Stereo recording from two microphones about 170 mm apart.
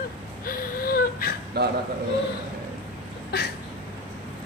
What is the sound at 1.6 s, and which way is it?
Speech, 75° right (ahead or behind).